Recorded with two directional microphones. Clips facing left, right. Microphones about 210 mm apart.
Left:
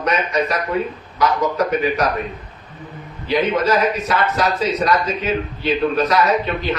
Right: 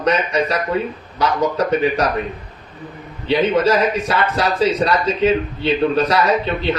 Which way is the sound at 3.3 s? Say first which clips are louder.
Right 2 dB; 30° right (ahead or behind).